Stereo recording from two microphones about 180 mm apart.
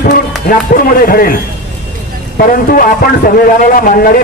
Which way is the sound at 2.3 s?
55° left (ahead or behind).